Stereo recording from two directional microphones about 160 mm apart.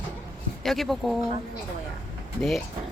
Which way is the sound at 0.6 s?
Centre (ahead or behind).